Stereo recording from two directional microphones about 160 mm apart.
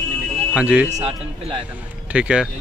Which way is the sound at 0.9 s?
40° right (ahead or behind).